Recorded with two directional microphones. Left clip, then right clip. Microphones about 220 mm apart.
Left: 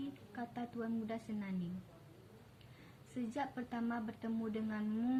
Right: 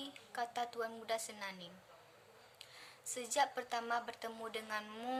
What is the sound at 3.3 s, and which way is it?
A woman's voice, 20° right (ahead or behind).